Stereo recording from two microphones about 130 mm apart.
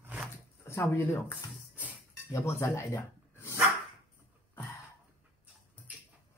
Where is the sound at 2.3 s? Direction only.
20° left (ahead or behind).